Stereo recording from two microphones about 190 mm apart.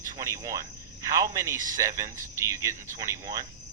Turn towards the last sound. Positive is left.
turn(degrees=-15)  # may be behind; listen again after turning